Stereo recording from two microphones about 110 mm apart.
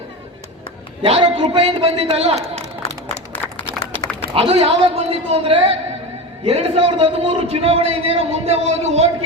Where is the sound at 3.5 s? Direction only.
60° left (ahead or behind).